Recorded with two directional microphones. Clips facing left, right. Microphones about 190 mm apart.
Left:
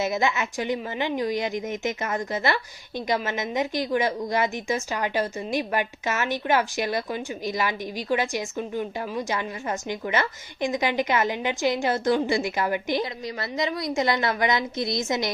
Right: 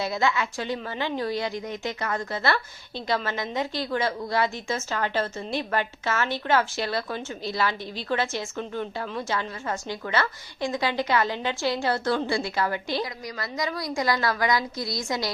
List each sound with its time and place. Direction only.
0.0 s a woman's voice: 20° left (ahead or behind)